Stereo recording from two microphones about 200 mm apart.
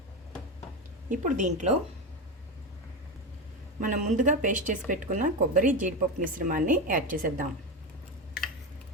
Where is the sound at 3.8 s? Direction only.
40° right (ahead or behind).